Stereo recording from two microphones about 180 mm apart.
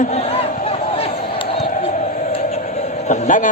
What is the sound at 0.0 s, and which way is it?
Crowd, 35° left (ahead or behind).